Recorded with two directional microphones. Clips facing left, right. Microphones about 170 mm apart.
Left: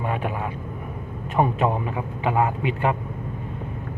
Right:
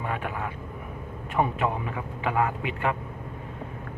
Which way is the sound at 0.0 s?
20° left (ahead or behind).